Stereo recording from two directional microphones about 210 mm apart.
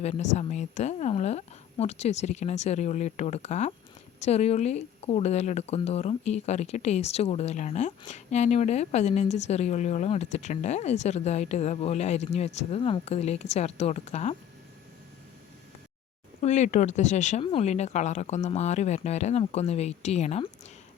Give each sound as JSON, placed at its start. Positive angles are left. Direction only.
{"t": 0.0, "sound": "speech", "side_deg": 30}
{"t": 16.4, "sound": "speech", "side_deg": 35}